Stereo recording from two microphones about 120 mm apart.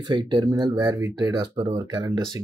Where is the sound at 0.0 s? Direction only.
40° right (ahead or behind).